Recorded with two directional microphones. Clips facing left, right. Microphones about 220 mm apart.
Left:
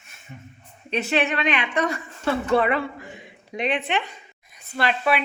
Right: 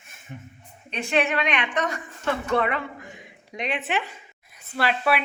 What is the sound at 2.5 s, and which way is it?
Speech, 35° left (ahead or behind).